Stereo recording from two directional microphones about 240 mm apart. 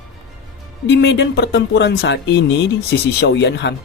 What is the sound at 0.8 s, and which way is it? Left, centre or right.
Speech, left.